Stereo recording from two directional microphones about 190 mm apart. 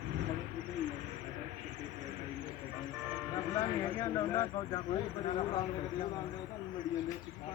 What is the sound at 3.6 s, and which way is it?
Speech, 15° left (ahead or behind).